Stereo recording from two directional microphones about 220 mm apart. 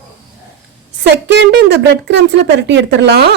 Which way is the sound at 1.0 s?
50° right (ahead or behind).